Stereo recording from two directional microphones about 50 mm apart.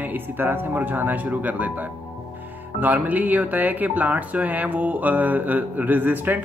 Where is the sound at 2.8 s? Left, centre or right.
Right.